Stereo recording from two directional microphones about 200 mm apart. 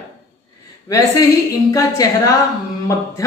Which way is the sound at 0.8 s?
15° left (ahead or behind).